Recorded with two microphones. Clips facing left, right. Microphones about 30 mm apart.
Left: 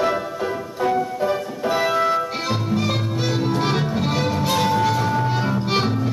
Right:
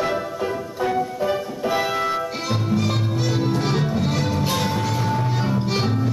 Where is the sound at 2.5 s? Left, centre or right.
Centre.